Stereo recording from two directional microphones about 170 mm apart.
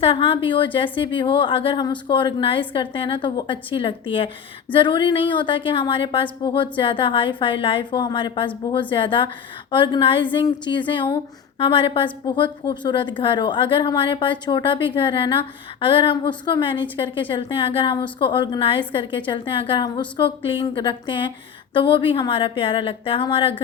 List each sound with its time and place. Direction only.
0.0 s a woman's voice: 35° left (ahead or behind)